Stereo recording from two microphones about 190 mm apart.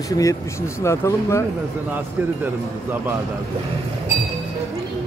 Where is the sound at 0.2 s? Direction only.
15° left (ahead or behind).